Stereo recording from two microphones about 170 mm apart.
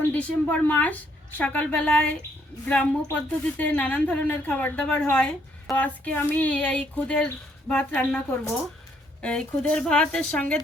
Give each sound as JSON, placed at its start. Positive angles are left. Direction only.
{"t": 0.1, "sound": "a woman's voice", "side_deg": 10}
{"t": 9.2, "sound": "a woman's voice", "side_deg": 5}